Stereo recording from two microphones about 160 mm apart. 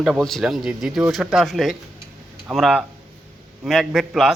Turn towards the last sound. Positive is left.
turn(degrees=-5)  # may be behind; listen again after turning